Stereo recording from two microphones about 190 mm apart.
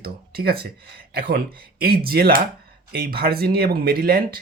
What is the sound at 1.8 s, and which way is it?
Speech, 55° right (ahead or behind).